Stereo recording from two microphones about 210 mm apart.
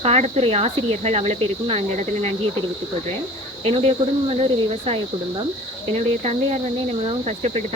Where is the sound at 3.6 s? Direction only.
30° right (ahead or behind).